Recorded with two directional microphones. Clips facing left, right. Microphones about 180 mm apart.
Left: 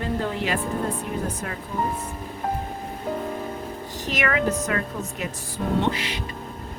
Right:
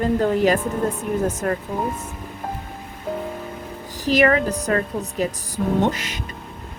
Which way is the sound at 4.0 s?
35° right (ahead or behind).